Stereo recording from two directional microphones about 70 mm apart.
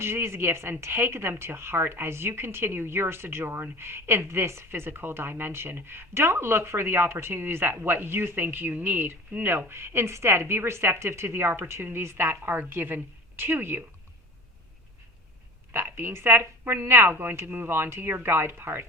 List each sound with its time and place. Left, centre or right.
0.0 s a woman's voice: right
15.7 s a woman's voice: right